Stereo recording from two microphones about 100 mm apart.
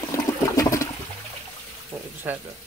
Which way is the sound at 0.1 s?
30° left (ahead or behind).